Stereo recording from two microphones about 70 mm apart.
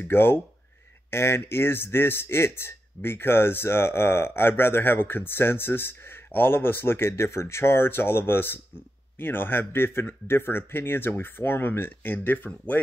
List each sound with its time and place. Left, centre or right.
0.0 s a man's voice: left